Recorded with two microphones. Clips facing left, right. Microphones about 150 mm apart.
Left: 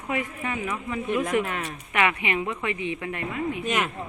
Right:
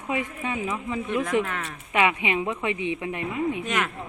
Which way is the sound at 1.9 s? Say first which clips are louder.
Right 2 dB; 20° right (ahead or behind).